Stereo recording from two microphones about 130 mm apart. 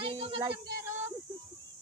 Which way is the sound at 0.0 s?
45° right (ahead or behind).